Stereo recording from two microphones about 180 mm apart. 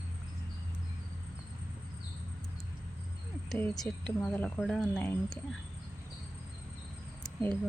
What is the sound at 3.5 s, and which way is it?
Speech, 5° left (ahead or behind).